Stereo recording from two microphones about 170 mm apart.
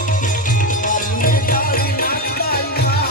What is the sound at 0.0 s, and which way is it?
Music, 50° left (ahead or behind).